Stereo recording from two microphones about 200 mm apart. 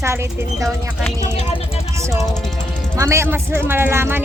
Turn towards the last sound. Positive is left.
turn(degrees=-10)  # may be behind; listen again after turning